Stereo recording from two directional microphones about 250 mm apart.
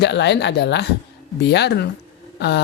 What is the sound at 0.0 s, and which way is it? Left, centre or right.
Speech, left.